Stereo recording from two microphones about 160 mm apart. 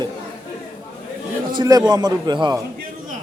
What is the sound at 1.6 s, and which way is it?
Speech, 25° right (ahead or behind).